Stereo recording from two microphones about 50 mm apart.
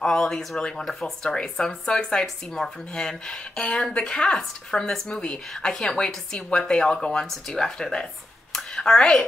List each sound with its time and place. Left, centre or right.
0.0 s speech: centre
0.8 s speech: centre
8.5 s a sound: centre